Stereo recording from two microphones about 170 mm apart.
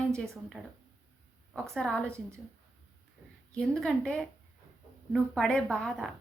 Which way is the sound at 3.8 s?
5° left (ahead or behind).